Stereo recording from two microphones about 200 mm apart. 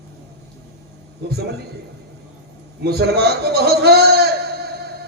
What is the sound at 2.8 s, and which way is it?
A man's voice, 55° right (ahead or behind).